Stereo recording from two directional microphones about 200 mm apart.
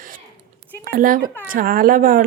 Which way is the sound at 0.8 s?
45° right (ahead or behind).